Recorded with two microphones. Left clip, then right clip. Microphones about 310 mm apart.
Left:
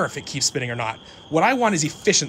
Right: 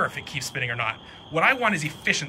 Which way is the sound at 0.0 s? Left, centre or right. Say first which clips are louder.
Left 3 dB; centre.